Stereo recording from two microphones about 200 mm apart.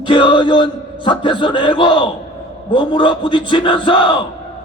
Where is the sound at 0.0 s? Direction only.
25° left (ahead or behind).